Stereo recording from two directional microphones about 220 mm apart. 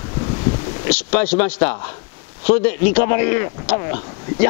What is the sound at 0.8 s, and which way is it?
Speech, 10° left (ahead or behind).